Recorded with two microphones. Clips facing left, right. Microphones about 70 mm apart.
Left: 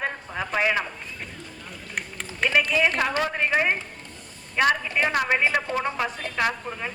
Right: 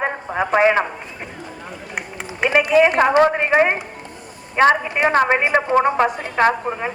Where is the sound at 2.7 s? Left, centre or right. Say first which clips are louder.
Right 10 dB; right.